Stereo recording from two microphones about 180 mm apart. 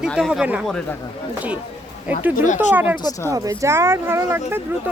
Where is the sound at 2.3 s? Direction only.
45° left (ahead or behind).